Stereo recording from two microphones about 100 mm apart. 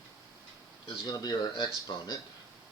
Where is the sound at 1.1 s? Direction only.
40° left (ahead or behind).